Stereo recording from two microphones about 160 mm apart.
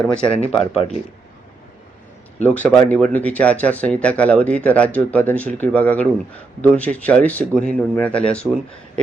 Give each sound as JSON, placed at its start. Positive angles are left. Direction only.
{"t": 0.3, "sound": "speech", "side_deg": 40}
{"t": 2.4, "sound": "speech", "side_deg": 10}